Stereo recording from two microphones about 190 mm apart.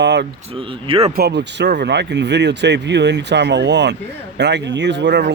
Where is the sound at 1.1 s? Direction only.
60° right (ahead or behind).